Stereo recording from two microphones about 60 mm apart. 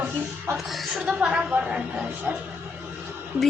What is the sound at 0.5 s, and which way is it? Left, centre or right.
A woman's voice, centre.